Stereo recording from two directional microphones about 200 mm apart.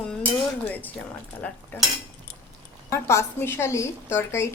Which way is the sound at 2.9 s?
15° left (ahead or behind).